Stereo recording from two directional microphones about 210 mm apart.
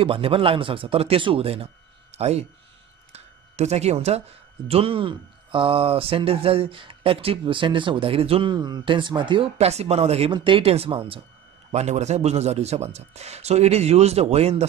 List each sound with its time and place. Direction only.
0.0 s a man's voice: 25° right (ahead or behind)